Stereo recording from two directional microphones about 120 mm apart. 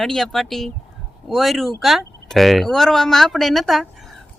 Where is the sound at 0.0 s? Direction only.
Centre (ahead or behind).